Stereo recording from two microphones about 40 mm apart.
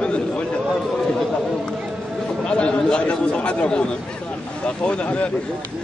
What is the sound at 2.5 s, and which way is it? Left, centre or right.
Speech, left.